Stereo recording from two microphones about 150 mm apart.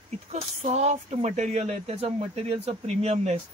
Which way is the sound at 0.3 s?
45° right (ahead or behind).